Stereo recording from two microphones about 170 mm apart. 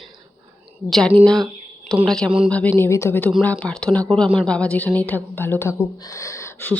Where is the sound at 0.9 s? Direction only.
5° left (ahead or behind).